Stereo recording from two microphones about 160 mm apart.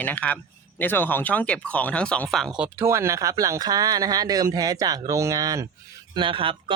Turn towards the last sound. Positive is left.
turn(degrees=-35)  # may be behind; listen again after turning